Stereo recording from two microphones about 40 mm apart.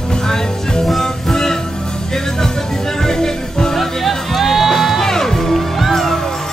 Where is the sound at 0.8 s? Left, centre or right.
Centre.